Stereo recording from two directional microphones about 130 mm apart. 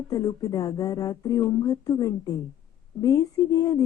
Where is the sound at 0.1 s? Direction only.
25° left (ahead or behind).